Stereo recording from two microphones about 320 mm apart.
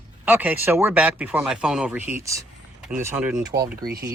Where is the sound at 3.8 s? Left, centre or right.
Right.